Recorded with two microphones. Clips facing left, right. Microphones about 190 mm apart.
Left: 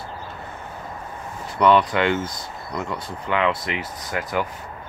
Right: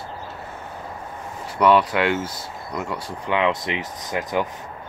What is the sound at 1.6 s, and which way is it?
Speech, 10° right (ahead or behind).